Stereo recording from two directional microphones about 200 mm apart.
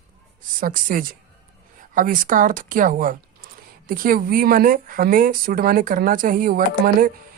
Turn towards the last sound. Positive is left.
turn(degrees=-45)  # may be behind; listen again after turning